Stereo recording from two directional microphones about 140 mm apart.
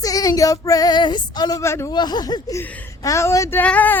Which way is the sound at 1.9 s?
30° left (ahead or behind).